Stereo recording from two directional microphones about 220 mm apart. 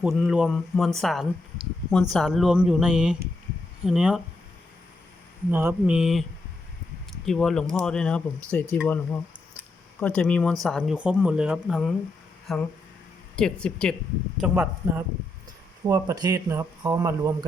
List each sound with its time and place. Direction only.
0.0 s speech: centre (ahead or behind)
5.5 s speech: 10° right (ahead or behind); by 8.8 s 10° left (ahead or behind)
10.0 s speech: 5° left (ahead or behind); by 17.3 s 15° right (ahead or behind)